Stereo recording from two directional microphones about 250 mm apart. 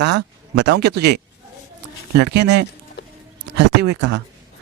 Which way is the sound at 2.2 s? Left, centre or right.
Right.